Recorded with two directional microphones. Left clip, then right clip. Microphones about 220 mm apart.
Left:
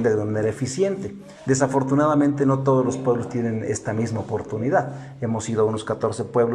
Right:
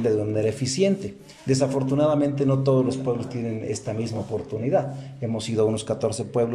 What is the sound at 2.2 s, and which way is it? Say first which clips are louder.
Speech: left 3 dB; 20° right (ahead or behind).